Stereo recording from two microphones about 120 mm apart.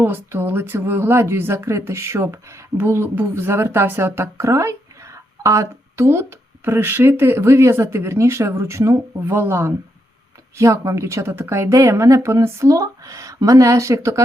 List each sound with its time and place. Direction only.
0.0 s speech: 20° right (ahead or behind)